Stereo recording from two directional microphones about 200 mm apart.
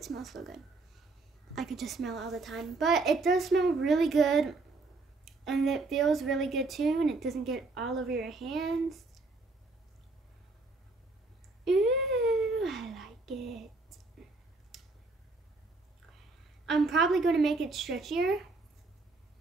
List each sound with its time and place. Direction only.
0.0 s a woman's voice: centre (ahead or behind)
11.6 s a sound: centre (ahead or behind)
16.6 s a woman's voice: centre (ahead or behind)